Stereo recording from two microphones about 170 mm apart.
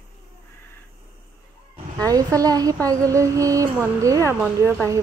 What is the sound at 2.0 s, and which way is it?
Speech, 20° right (ahead or behind).